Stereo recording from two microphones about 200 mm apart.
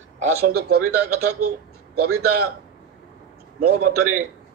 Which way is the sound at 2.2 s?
50° right (ahead or behind).